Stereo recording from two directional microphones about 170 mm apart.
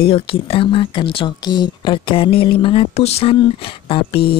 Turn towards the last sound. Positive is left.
turn(degrees=35)  # may be behind; listen again after turning